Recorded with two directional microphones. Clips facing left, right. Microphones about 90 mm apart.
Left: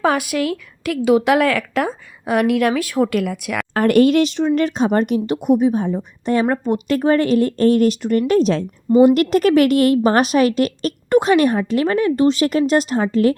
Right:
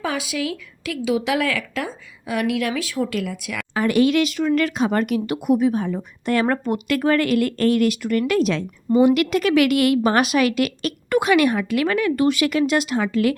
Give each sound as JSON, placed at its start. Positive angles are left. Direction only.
{"t": 0.0, "sound": "a woman's voice", "side_deg": 55}